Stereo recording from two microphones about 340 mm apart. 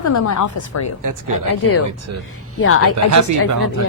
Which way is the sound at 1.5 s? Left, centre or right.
Left.